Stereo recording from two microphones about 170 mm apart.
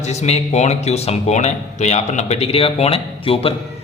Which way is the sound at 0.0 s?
40° left (ahead or behind).